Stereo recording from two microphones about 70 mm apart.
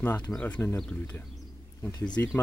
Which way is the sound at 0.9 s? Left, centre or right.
Left.